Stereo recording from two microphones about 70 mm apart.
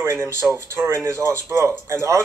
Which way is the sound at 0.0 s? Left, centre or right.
Right.